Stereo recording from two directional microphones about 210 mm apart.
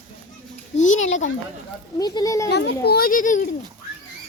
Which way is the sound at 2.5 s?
50° left (ahead or behind).